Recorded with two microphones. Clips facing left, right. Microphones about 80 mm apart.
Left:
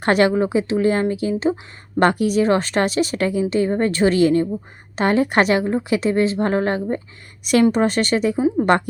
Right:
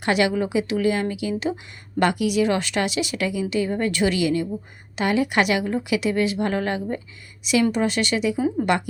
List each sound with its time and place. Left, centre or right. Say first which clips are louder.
0.0 s a woman's voice: left 5 dB; left
8.4 s a woman's voice: left 4 dB; left